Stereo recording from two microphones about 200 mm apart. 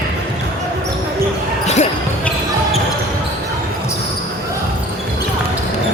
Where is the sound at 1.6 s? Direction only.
35° left (ahead or behind).